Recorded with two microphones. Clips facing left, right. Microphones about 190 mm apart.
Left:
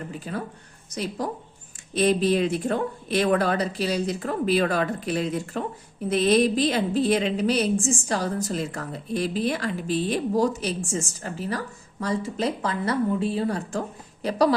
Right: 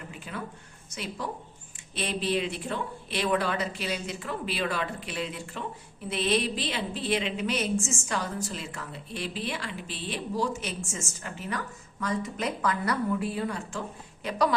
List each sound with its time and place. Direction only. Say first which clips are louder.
0.1 s a woman's voice: left 6 dB; 40° left (ahead or behind)